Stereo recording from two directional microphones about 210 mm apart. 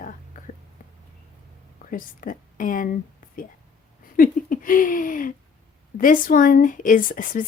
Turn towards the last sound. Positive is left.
turn(degrees=40)  # may be behind; listen again after turning